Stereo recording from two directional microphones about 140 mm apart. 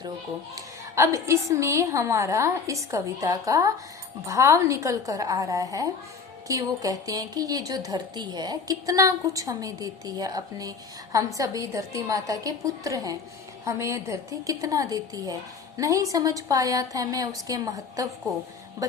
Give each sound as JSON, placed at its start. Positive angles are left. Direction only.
{"t": 0.5, "sound": "a woman's voice", "side_deg": -20}